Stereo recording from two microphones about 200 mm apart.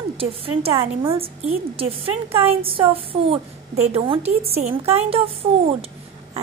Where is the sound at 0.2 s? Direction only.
30° right (ahead or behind).